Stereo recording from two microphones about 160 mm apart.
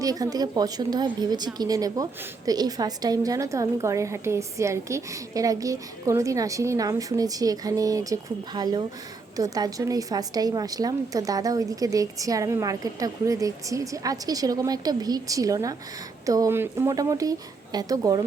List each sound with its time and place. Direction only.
0.0 s speech: 25° right (ahead or behind)